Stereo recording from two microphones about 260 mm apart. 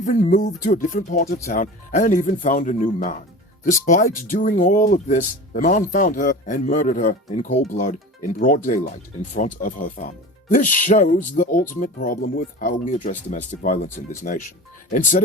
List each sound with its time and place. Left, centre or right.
0.0 s speech: left